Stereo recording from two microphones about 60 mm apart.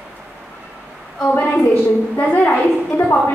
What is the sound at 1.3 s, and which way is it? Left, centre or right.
A woman's voice, left.